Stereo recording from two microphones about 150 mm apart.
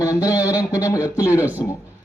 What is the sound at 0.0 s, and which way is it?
A man's voice, 20° left (ahead or behind).